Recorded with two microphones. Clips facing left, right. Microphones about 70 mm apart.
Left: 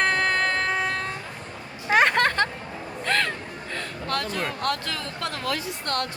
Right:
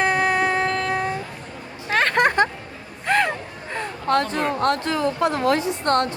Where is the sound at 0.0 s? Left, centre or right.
Centre.